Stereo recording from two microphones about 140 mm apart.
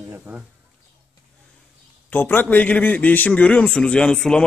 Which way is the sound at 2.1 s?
15° left (ahead or behind).